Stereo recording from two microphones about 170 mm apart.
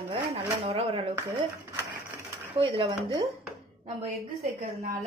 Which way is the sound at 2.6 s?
30° right (ahead or behind).